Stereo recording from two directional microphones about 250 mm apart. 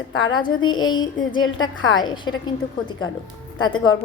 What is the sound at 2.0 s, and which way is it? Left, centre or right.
Speech, centre.